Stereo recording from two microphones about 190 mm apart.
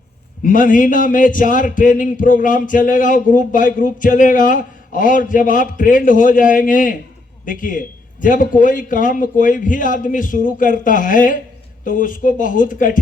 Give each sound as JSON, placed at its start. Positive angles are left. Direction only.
{"t": 0.4, "sound": "a man's voice", "side_deg": 45}